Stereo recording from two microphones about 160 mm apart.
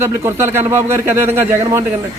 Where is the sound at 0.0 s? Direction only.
15° right (ahead or behind).